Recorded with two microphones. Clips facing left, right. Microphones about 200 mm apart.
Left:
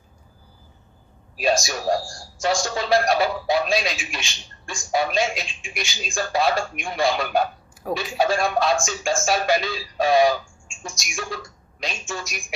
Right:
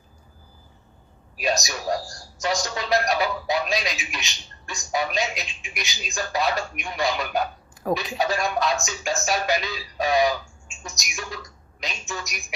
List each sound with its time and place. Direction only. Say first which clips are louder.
1.4 s a man's voice: left 4 dB; 30° left (ahead or behind)